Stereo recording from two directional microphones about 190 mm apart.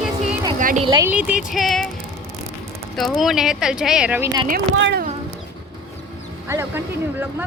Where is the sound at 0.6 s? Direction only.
45° right (ahead or behind).